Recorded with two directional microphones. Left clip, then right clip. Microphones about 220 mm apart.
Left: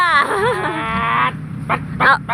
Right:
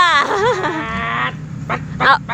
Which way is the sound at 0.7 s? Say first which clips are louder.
Left 2 dB; 5° left (ahead or behind).